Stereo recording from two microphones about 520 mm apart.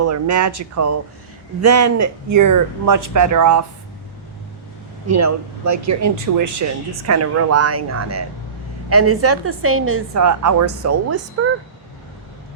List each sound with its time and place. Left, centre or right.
0.0 s speech: right
5.0 s speech: right